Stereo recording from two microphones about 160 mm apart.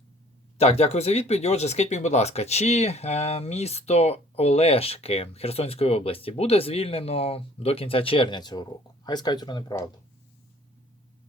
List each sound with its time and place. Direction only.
0.6 s speech: 40° left (ahead or behind); by 9.9 s 25° left (ahead or behind)